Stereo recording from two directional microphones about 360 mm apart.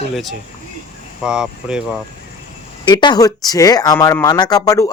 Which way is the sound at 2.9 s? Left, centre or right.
Centre.